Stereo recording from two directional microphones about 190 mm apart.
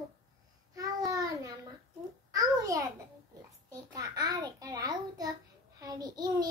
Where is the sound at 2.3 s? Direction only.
15° right (ahead or behind).